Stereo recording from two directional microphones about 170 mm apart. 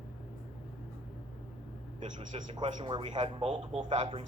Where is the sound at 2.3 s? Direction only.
25° right (ahead or behind).